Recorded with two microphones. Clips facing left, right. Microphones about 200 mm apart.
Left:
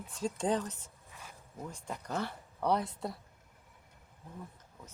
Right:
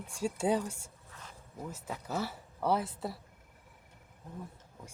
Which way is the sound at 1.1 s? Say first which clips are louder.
Even; 10° left (ahead or behind).